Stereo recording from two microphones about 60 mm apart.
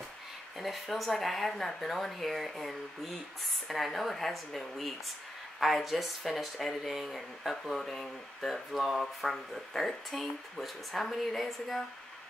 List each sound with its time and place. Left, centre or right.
0.6 s speech: centre